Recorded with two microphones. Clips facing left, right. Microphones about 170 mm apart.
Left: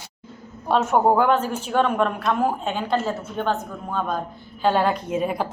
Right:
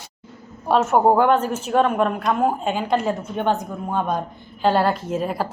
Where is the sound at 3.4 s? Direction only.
15° right (ahead or behind); by 5.4 s centre (ahead or behind).